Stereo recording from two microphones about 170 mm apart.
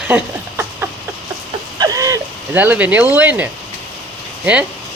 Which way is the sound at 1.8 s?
20° right (ahead or behind).